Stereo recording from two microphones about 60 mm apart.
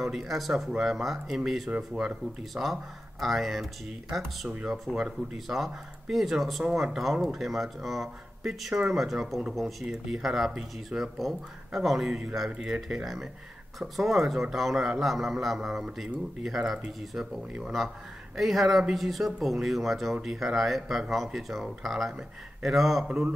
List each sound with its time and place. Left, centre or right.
0.0 s speech: centre
2.5 s speech: centre
4.9 s speech: centre
9.8 s speech: centre
10.2 s speech: centre
23.0 s speech: centre